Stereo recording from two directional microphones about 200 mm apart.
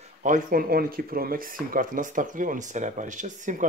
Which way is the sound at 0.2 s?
45° right (ahead or behind).